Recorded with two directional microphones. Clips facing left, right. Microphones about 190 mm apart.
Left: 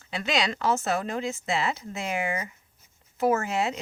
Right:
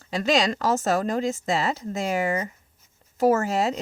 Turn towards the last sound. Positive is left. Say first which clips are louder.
# right 4 dB
turn(degrees=-40)  # may be behind; listen again after turning